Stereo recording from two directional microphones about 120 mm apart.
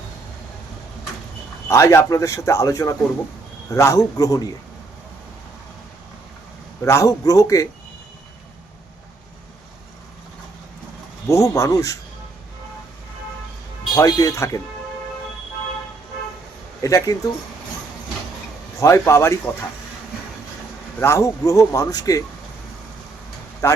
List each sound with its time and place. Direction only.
1.6 s speech: 25° left (ahead or behind)
6.8 s speech: 25° left (ahead or behind)
11.3 s speech: 25° left (ahead or behind)
13.9 s speech: 25° left (ahead or behind)
16.8 s speech: 25° left (ahead or behind)
18.8 s speech: 25° left (ahead or behind)
21.0 s speech: 25° left (ahead or behind)
23.6 s speech: 25° left (ahead or behind)